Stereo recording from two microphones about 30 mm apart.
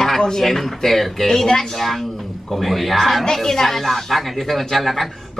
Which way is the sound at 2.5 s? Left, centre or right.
Centre.